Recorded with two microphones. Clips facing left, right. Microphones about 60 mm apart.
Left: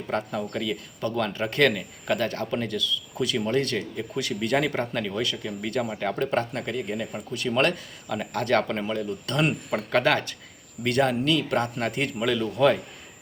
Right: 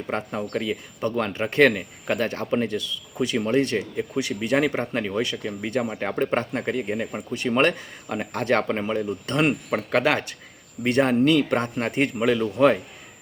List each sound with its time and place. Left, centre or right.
0.1 s speech: right
7.3 s speech: right
9.7 s speech: centre
10.8 s speech: right